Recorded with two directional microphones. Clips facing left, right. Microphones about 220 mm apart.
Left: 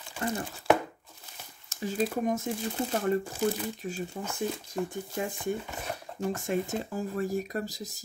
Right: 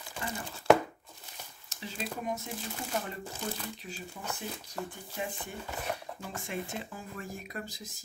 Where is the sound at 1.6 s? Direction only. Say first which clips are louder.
Left 10 dB; 45° left (ahead or behind).